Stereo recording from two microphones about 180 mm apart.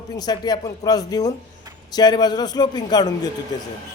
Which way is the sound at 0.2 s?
25° left (ahead or behind).